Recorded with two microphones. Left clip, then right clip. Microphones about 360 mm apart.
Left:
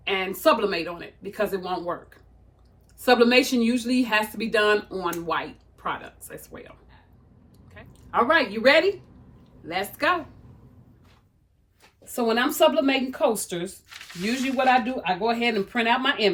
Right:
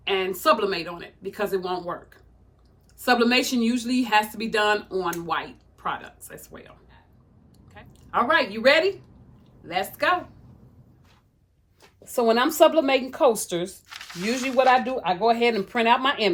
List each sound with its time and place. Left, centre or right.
0.0 s a woman's voice: centre
12.0 s speech: centre